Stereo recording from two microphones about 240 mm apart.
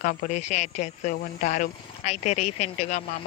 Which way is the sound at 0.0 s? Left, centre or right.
Left.